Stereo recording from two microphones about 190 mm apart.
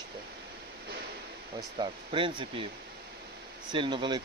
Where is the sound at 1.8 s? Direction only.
25° right (ahead or behind).